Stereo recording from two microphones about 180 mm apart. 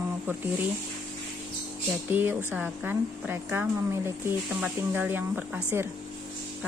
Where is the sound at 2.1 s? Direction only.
10° right (ahead or behind).